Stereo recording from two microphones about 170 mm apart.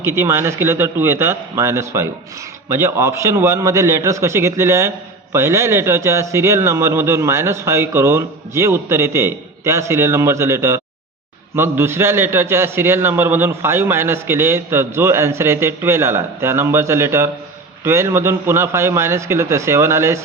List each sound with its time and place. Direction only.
0.0 s a man's voice: 15° right (ahead or behind)